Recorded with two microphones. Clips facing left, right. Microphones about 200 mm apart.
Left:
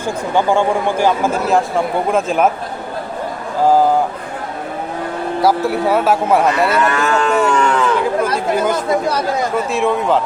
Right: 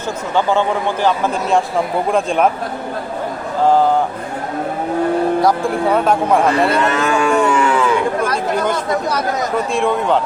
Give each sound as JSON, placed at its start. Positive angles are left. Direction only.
{"t": 0.3, "sound": "a man's voice", "side_deg": 15}
{"t": 5.4, "sound": "speech", "side_deg": 5}
{"t": 6.7, "sound": "livestock", "side_deg": -20}
{"t": 7.3, "sound": "cattle", "side_deg": -5}
{"t": 8.5, "sound": "a man's voice", "side_deg": 5}
{"t": 8.9, "sound": "speech", "side_deg": 30}
{"t": 9.7, "sound": "speech", "side_deg": 0}